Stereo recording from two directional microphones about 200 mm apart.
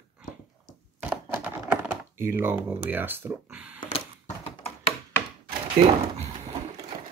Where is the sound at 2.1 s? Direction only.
10° right (ahead or behind).